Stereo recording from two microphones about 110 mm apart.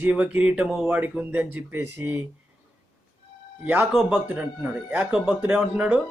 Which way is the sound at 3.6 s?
15° right (ahead or behind).